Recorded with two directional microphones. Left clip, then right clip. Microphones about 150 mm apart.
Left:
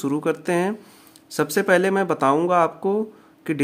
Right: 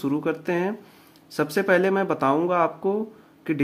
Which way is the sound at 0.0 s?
30° left (ahead or behind).